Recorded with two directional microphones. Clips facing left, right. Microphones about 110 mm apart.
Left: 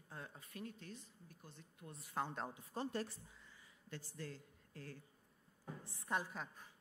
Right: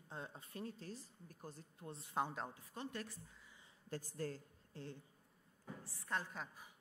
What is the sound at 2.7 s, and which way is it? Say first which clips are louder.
Speech: left 5 dB; 30° left (ahead or behind).